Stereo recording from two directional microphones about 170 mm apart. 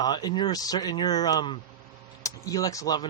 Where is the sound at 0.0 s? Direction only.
25° left (ahead or behind).